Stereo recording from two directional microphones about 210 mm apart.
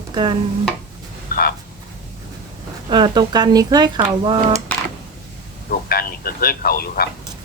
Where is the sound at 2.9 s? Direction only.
20° right (ahead or behind).